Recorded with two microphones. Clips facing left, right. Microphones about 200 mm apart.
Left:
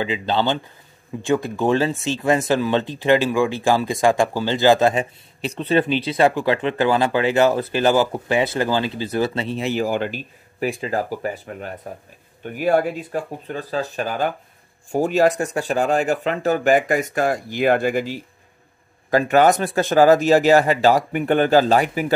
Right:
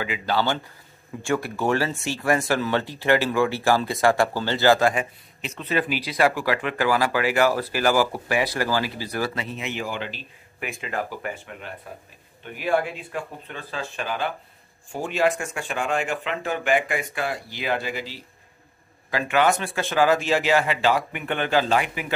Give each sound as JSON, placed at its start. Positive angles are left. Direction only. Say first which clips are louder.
{"t": 0.0, "sound": "speech", "louder": "left 3 dB", "side_deg": 25}
{"t": 10.7, "sound": "speech", "louder": "left 4 dB", "side_deg": 35}